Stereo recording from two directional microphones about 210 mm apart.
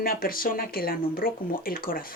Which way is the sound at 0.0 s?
45° left (ahead or behind).